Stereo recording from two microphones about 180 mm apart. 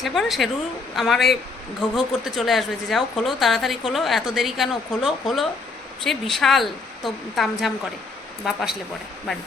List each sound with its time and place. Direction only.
0.0 s a woman's voice: centre (ahead or behind)